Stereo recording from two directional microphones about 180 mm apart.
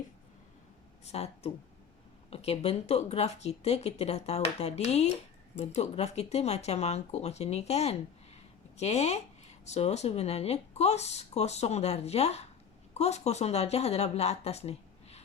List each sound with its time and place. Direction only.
1.0 s speech: 35° left (ahead or behind)